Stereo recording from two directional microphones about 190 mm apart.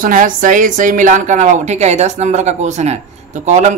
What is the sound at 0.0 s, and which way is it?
A woman's voice, 45° right (ahead or behind).